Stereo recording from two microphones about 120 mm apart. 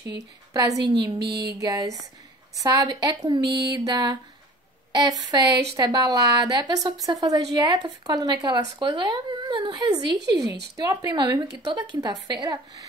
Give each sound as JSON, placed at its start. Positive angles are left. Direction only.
{"t": 0.1, "sound": "speech", "side_deg": -30}